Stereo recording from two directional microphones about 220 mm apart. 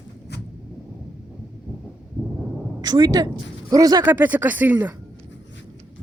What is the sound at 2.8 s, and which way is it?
Speech, 20° right (ahead or behind).